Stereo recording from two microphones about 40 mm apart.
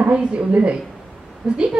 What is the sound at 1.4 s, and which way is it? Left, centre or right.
Speech, right.